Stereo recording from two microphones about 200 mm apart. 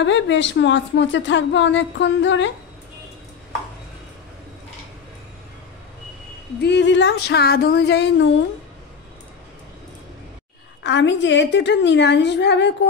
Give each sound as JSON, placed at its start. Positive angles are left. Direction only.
{"t": 0.0, "sound": "a woman's voice", "side_deg": 65}
{"t": 6.6, "sound": "a woman's voice", "side_deg": 60}
{"t": 10.8, "sound": "a woman's voice", "side_deg": 60}